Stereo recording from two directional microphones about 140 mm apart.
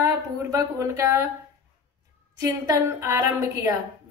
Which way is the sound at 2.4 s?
20° right (ahead or behind).